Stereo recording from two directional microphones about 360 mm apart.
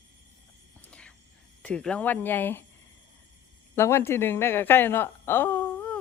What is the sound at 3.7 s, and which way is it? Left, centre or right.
A woman's voice, centre.